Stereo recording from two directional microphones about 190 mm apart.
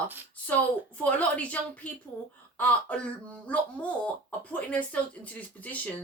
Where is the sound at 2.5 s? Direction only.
5° left (ahead or behind).